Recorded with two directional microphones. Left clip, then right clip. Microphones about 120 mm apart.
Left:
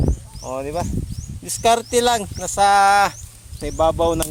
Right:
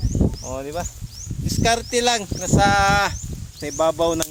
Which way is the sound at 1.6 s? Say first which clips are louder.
Left 3 dB; 80° left.